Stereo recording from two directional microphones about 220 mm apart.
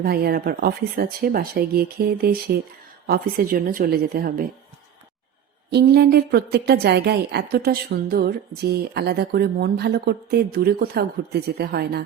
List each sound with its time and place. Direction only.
0.0 s a woman's voice: 45° right (ahead or behind)
5.7 s a woman's voice: 45° right (ahead or behind)